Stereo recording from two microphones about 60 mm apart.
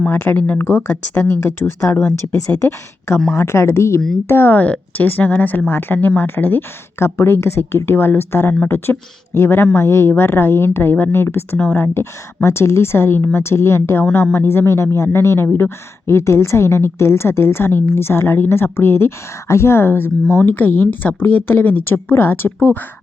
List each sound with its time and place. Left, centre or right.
0.1 s a woman's voice: left
4.3 s a woman's voice: left